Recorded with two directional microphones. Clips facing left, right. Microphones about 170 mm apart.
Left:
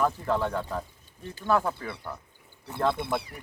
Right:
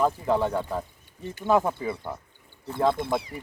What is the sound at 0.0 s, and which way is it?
Speech, 15° right (ahead or behind).